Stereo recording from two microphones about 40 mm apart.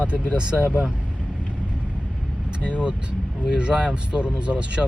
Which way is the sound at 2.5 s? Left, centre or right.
Right.